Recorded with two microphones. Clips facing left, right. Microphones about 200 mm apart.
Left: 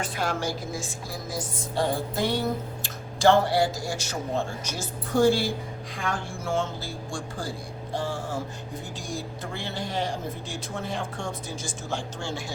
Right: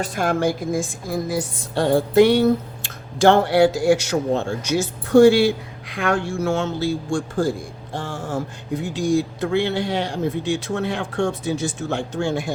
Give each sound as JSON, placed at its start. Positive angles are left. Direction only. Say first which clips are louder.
{"t": 0.0, "sound": "a woman's voice", "louder": "right 8 dB", "side_deg": -45}
{"t": 8.7, "sound": "a woman's voice", "louder": "right 17 dB", "side_deg": -75}